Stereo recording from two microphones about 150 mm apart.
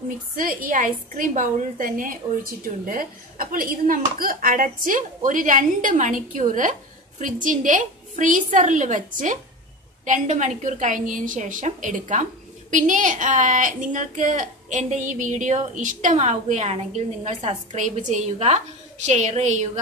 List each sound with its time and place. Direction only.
0.4 s a woman's voice: 65° right (ahead or behind); by 19.8 s 50° right (ahead or behind)